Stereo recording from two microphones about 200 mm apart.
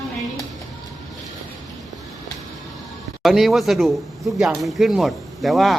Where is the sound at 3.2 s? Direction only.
Centre (ahead or behind).